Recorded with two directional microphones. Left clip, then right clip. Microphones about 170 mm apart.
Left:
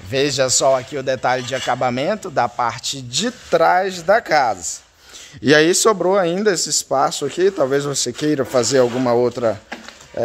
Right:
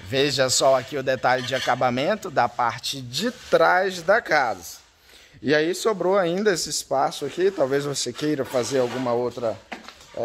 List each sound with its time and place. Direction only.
0.1 s a man's voice: 5° left (ahead or behind)
5.4 s speech: 30° left (ahead or behind)
5.9 s speech: 10° left (ahead or behind); by 9.6 s 45° left (ahead or behind)